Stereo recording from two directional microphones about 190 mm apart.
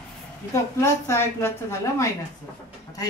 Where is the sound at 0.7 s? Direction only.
15° left (ahead or behind).